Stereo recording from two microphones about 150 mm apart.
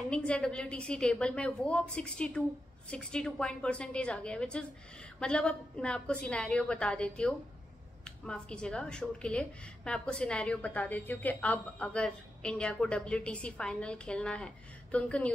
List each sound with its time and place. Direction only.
0.1 s speech: 5° left (ahead or behind)